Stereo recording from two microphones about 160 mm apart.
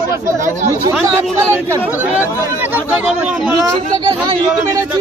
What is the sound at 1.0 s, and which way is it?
Speech, 20° right (ahead or behind).